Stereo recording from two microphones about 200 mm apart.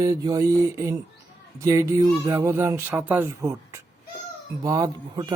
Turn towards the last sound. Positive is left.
turn(degrees=-20)  # may be behind; listen again after turning